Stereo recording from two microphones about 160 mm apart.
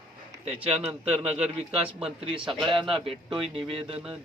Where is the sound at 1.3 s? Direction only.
35° right (ahead or behind).